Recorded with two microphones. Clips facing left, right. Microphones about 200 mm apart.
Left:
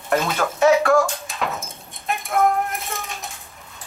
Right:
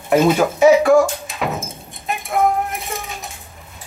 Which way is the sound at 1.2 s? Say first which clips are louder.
Right 4 dB; centre (ahead or behind).